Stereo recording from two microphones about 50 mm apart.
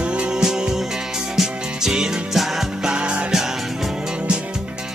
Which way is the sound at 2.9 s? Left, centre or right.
Right.